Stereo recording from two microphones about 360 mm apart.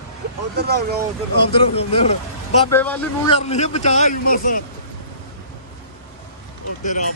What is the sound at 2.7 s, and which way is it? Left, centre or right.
Speech, centre.